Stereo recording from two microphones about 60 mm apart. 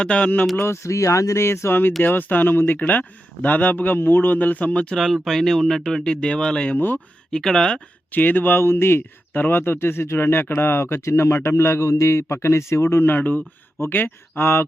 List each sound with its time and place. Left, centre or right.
0.0 s speech: centre
0.5 s speech: left
4.9 s speech: centre
6.0 s speech: centre
6.7 s speech: left
7.3 s speech: centre
8.1 s speech: left